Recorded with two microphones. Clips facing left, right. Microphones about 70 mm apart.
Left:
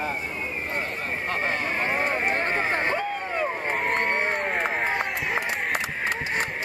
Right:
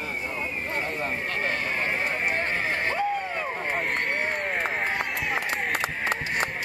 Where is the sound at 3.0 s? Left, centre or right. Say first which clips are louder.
Even; centre.